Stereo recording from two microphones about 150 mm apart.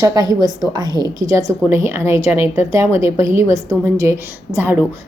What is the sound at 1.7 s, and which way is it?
A woman's voice, 15° right (ahead or behind).